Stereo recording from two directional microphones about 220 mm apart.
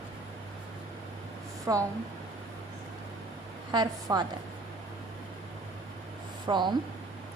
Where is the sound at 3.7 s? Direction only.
20° right (ahead or behind).